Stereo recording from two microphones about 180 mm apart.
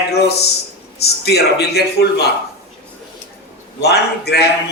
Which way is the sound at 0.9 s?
65° left (ahead or behind).